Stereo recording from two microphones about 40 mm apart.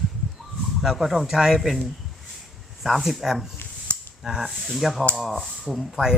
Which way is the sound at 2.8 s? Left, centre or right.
Centre.